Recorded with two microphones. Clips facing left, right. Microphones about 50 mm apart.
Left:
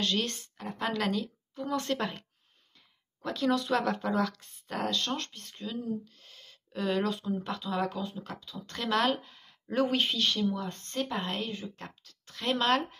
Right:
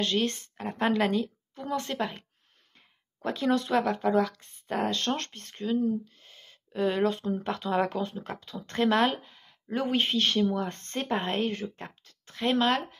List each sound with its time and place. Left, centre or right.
0.0 s a woman's voice: right
3.2 s a woman's voice: right
4.9 s speech: right
6.2 s a sound: right
7.2 s speech: right
8.5 s a woman's voice: right
9.1 s a sound: centre
9.9 s speech: right
11.4 s speech: right
11.8 s a woman's voice: right
12.6 s speech: centre